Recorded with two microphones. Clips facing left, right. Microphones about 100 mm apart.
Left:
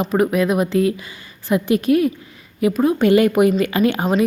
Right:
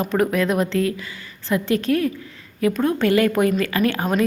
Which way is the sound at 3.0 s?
20° left (ahead or behind).